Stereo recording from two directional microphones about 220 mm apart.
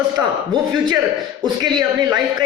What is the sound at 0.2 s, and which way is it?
Speech, 15° right (ahead or behind).